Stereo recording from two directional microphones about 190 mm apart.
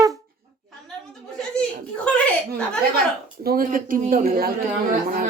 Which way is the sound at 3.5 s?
50° right (ahead or behind).